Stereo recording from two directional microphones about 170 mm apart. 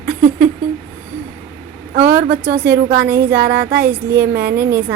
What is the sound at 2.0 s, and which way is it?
Speech, 15° right (ahead or behind).